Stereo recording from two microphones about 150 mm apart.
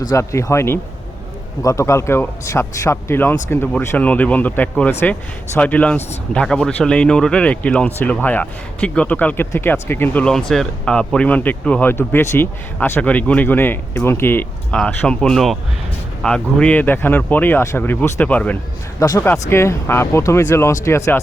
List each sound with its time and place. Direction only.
0.0 s speech: 20° left (ahead or behind)
18.9 s speech: 20° left (ahead or behind)